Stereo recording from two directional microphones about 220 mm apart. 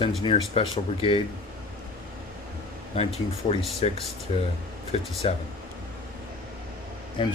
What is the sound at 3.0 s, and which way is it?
Speech, 25° left (ahead or behind).